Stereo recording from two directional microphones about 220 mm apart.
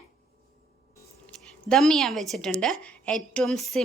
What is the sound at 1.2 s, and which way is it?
A woman's voice, 5° left (ahead or behind).